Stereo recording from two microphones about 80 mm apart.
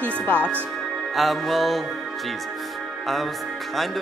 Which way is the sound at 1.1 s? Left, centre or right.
Centre.